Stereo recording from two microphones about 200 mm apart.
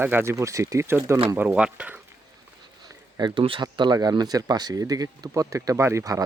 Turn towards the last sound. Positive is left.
turn(degrees=-15)  # may be behind; listen again after turning